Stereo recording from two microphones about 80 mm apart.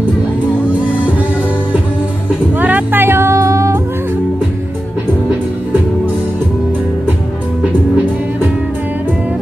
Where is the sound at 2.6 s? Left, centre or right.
Right.